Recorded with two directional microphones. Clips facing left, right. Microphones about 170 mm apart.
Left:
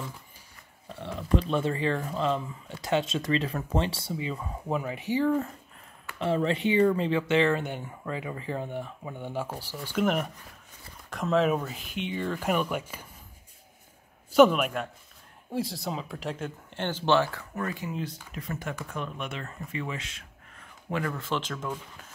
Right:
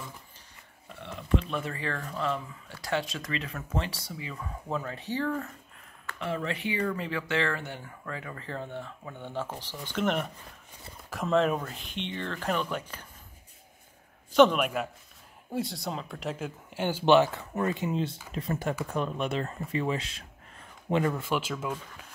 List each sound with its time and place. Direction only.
1.3 s speech: 30° left (ahead or behind); by 5.4 s 15° left (ahead or behind)
6.1 s speech: 30° left (ahead or behind); by 13.0 s 10° left (ahead or behind)
14.3 s speech: 5° left (ahead or behind)